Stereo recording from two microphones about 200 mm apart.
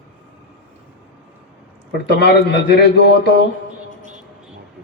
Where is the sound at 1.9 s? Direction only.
55° left (ahead or behind).